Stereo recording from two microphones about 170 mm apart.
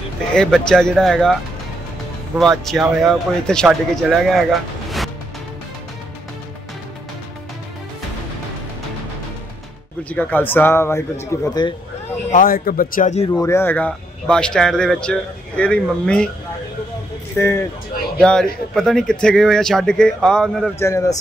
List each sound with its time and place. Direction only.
0.3 s speech: 5° left (ahead or behind)
10.0 s a man's voice: 10° left (ahead or behind)
12.3 s speech: 55° left (ahead or behind)
13.3 s speech: 15° left (ahead or behind)
17.4 s a man's voice: 15° left (ahead or behind)
18.2 s speech: 5° left (ahead or behind)
20.8 s speech: 20° left (ahead or behind)